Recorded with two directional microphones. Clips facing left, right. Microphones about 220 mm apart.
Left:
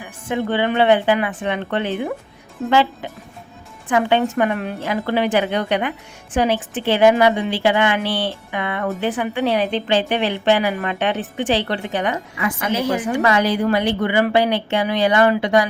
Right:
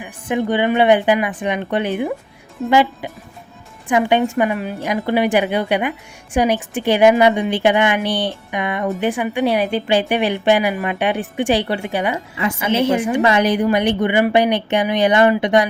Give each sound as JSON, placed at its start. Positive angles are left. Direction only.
{"t": 0.0, "sound": "a woman's voice", "side_deg": -15}
{"t": 4.8, "sound": "a woman's voice", "side_deg": -15}
{"t": 12.7, "sound": "a woman's voice", "side_deg": -25}